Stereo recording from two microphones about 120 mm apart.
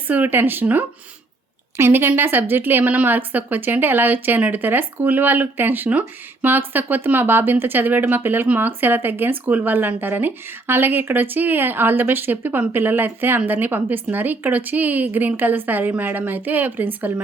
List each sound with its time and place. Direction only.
0.1 s a woman's voice: 15° right (ahead or behind)